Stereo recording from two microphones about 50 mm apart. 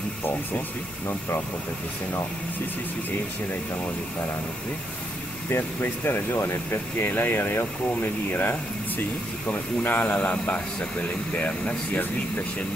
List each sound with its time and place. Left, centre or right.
5.6 s speech: left